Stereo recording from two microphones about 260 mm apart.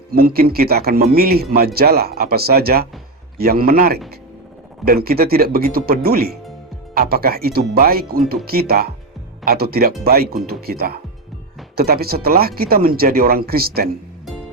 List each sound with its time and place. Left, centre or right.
0.1 s speech: right